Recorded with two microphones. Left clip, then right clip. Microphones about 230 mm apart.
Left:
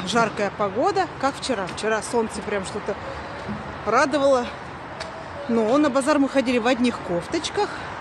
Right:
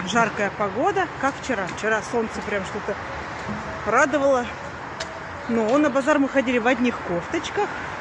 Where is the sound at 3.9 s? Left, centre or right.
Centre.